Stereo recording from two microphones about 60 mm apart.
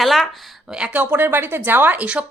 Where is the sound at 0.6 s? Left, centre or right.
Centre.